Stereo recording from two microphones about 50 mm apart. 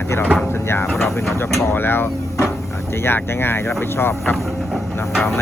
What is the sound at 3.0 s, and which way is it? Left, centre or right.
Speech, left.